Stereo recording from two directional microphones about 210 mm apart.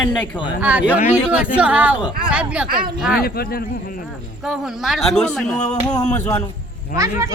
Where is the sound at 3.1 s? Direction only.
45° left (ahead or behind).